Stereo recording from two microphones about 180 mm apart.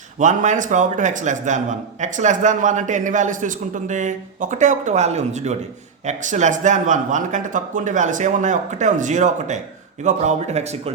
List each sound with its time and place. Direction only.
0.2 s a man's voice: 45° right (ahead or behind)